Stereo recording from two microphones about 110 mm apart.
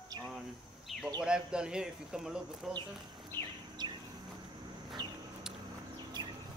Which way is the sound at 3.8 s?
40° right (ahead or behind).